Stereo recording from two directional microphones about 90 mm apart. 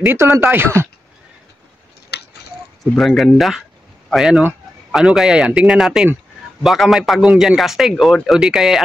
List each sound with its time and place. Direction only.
0.0 s speech: 30° right (ahead or behind)
3.0 s a man's voice: centre (ahead or behind)